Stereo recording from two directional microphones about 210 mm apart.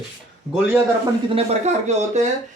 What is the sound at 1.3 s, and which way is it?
Speech, 30° right (ahead or behind).